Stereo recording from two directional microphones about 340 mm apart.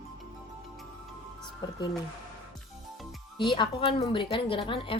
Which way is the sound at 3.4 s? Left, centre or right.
Centre.